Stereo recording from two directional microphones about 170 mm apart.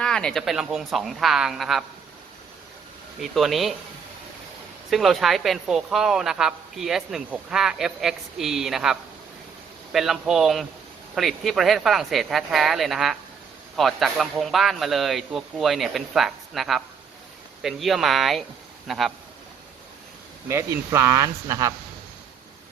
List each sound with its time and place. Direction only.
0.0 s speech: 5° left (ahead or behind)
3.2 s speech: centre (ahead or behind)
4.9 s speech: centre (ahead or behind)
20.5 s speech: 15° right (ahead or behind)